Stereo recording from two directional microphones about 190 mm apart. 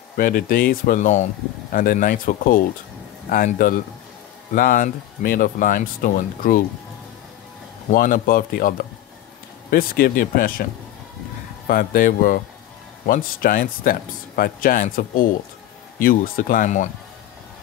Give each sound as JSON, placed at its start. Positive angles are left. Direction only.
{"t": 0.2, "sound": "a man's voice", "side_deg": 50}
{"t": 7.9, "sound": "a man's voice", "side_deg": 50}